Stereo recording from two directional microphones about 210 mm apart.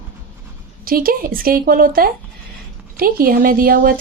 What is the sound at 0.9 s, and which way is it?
Speech, 45° right (ahead or behind).